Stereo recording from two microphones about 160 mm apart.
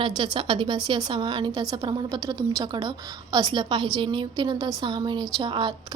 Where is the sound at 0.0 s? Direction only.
30° right (ahead or behind).